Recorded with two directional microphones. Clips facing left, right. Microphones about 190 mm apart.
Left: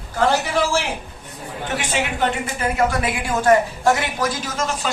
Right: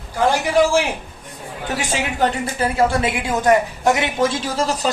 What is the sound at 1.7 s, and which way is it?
A woman's voice, 40° right (ahead or behind).